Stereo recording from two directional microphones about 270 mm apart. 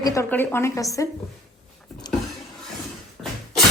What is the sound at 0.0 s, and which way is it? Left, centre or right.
A woman's voice, centre.